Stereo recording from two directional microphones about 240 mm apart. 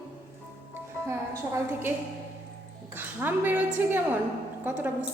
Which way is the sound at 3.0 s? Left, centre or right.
Centre.